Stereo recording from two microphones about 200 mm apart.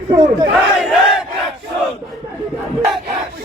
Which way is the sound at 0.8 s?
Centre (ahead or behind).